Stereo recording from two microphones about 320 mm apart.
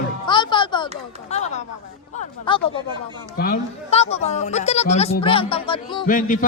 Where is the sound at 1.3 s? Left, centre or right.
Left.